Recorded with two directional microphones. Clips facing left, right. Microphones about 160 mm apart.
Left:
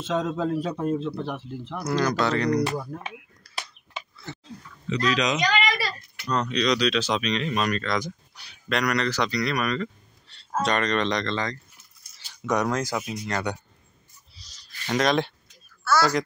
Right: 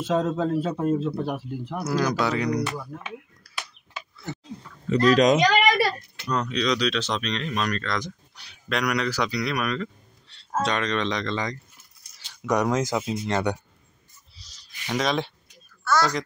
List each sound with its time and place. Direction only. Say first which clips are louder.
0.0 s speech: right 2 dB; 5° right (ahead or behind)
3.4 s a sound: left 1 dB; 5° right (ahead or behind)
4.8 s a sound: right 7 dB; 50° right (ahead or behind)
6.2 s speech: left 1 dB; 5° right (ahead or behind)
12.4 s speech: right 2 dB; 10° right (ahead or behind)
14.9 s speech: left 2 dB; centre (ahead or behind)